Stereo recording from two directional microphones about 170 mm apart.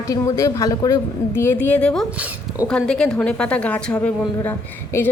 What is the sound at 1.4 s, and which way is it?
A woman's voice, 10° left (ahead or behind).